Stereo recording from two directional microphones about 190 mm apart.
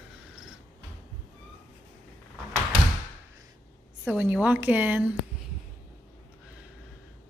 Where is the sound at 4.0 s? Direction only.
5° right (ahead or behind).